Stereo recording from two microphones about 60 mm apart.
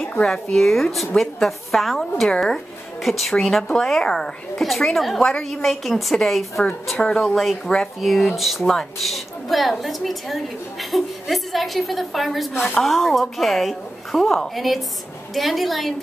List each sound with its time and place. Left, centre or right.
0.2 s a woman's voice: centre